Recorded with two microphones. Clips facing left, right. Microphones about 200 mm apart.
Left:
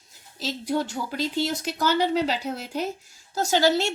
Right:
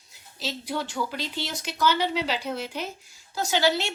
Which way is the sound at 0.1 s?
45° left (ahead or behind).